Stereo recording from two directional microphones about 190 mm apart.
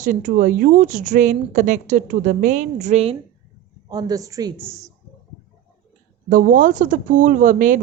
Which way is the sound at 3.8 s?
20° right (ahead or behind).